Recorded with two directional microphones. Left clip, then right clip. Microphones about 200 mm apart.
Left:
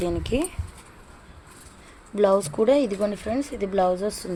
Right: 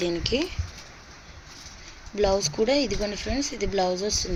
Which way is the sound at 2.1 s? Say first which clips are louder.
Left 3 dB; 20° left (ahead or behind).